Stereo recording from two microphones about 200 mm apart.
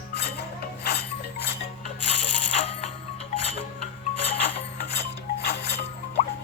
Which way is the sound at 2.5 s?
30° left (ahead or behind).